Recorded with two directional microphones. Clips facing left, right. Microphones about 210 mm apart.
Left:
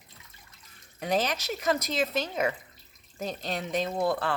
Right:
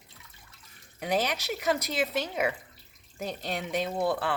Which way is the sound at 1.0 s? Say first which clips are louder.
Left 1 dB; 15° right (ahead or behind).